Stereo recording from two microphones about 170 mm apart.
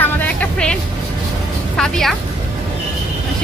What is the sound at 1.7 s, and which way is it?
Speech, 5° left (ahead or behind).